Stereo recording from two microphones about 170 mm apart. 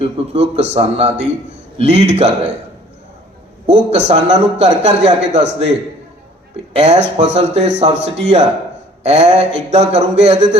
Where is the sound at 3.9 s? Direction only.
40° right (ahead or behind).